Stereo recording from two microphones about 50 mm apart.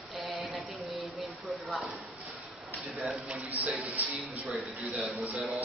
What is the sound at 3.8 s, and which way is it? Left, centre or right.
A man's voice, right.